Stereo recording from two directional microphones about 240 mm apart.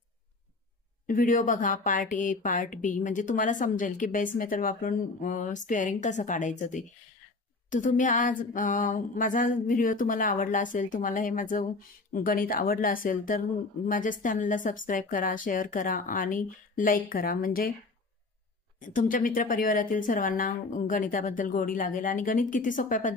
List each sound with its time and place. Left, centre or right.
1.0 s speech: left
18.9 s speech: left